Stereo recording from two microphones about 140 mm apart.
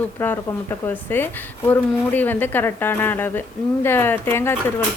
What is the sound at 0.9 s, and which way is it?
A woman's voice, 15° left (ahead or behind).